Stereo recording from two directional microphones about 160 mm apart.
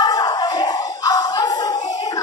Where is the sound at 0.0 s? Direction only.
25° left (ahead or behind).